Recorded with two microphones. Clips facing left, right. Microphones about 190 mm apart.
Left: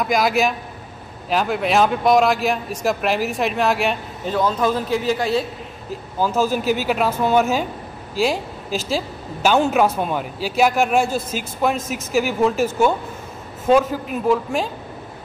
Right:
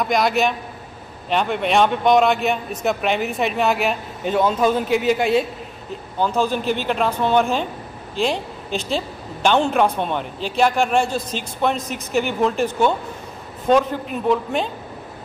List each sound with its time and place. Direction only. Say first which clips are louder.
0.0 s a man's voice: even; centre (ahead or behind)
4.3 s a man's voice: right 2 dB; 20° right (ahead or behind)
6.1 s a man's voice: left 1 dB; 5° left (ahead or behind)